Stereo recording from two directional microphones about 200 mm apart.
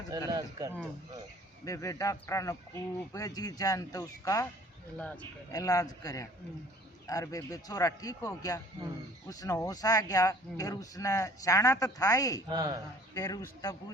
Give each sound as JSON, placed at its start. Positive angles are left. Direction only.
{"t": 0.3, "sound": "speech", "side_deg": -20}
{"t": 1.6, "sound": "speech", "side_deg": 15}
{"t": 4.9, "sound": "speech", "side_deg": 5}
{"t": 5.5, "sound": "speech", "side_deg": 20}
{"t": 12.5, "sound": "speech", "side_deg": -20}
{"t": 13.1, "sound": "speech", "side_deg": 15}